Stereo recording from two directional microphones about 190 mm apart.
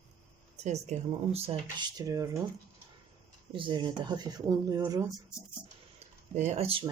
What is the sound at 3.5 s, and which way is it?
Speech, 25° right (ahead or behind).